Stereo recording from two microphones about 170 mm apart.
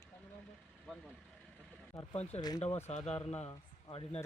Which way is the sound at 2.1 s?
40° left (ahead or behind).